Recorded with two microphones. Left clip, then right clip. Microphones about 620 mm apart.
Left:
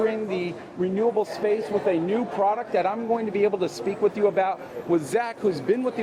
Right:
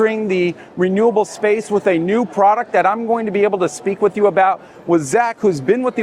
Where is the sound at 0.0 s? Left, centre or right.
Right.